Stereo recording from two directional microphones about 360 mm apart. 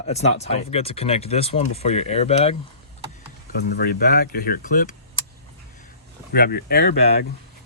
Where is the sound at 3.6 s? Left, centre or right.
Left.